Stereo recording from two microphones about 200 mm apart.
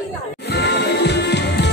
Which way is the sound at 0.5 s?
55° left (ahead or behind).